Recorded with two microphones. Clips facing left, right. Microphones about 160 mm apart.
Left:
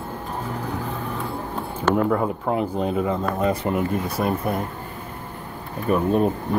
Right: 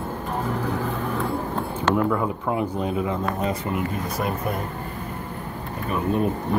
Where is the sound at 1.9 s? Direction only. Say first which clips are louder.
Left 2 dB; 45° left (ahead or behind).